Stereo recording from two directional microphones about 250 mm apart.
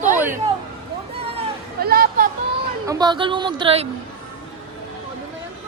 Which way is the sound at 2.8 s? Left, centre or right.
Centre.